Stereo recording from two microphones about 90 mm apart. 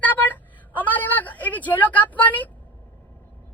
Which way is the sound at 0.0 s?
20° left (ahead or behind).